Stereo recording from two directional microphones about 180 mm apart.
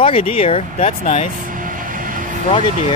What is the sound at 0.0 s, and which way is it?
Speech, 30° left (ahead or behind).